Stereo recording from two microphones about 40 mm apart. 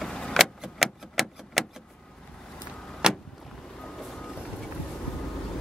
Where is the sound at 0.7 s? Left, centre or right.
Centre.